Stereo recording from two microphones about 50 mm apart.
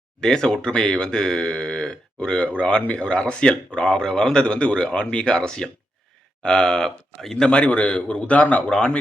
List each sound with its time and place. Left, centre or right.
0.2 s speech: centre
7.5 s a man's voice: left